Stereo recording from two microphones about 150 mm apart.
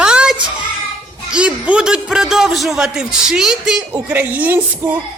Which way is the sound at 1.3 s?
5° right (ahead or behind).